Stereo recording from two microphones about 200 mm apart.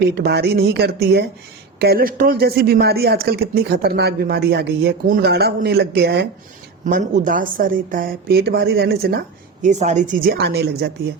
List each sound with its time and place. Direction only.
0.2 s a woman's voice: 55° right (ahead or behind)
6.8 s speech: 40° right (ahead or behind)
9.6 s speech: 35° right (ahead or behind); by 10.9 s 55° right (ahead or behind)